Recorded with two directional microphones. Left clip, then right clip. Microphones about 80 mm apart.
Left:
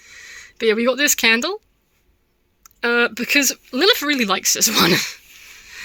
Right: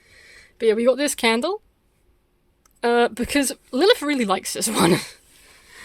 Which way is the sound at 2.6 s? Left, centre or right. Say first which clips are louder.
Left 1 dB; right.